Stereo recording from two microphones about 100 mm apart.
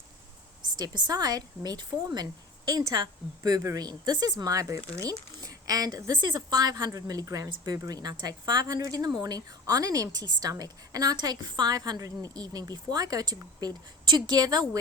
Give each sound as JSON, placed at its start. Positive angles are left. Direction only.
{"t": 0.8, "sound": "a woman's voice", "side_deg": -45}